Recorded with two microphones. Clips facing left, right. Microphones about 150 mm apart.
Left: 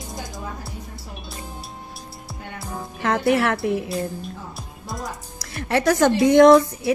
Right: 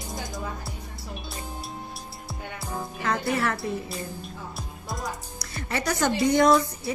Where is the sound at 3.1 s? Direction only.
75° left (ahead or behind).